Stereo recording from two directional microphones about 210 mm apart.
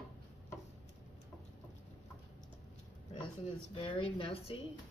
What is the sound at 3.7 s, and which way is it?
Speech, 25° left (ahead or behind).